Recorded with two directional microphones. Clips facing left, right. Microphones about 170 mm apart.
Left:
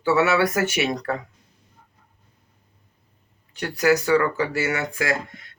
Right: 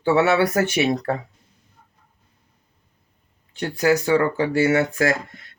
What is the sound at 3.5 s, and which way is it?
Speech, 25° right (ahead or behind).